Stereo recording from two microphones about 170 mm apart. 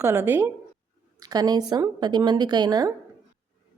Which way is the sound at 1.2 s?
20° right (ahead or behind).